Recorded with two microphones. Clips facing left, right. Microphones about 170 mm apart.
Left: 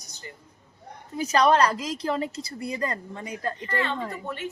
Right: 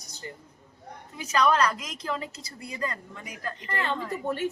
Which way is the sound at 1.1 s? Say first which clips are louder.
Left 4 dB; 35° left (ahead or behind).